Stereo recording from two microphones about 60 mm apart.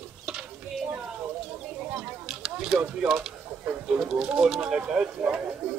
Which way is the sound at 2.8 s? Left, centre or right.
Centre.